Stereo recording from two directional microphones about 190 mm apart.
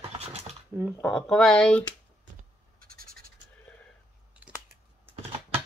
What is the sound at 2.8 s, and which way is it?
Scratch, 50° right (ahead or behind).